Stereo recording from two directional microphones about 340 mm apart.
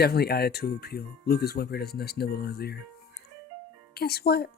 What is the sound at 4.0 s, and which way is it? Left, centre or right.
Speech, left.